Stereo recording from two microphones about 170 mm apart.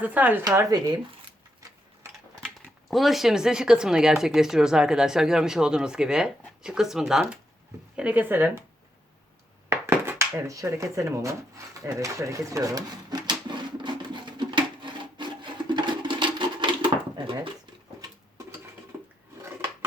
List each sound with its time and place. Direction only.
0.0 s speech: 10° right (ahead or behind)
2.9 s speech: centre (ahead or behind)
9.6 s dishes: 15° right (ahead or behind)
18.9 s rub: 10° right (ahead or behind)